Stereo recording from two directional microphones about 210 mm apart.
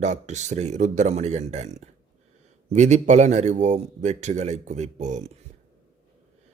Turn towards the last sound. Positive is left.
turn(degrees=-35)  # may be behind; listen again after turning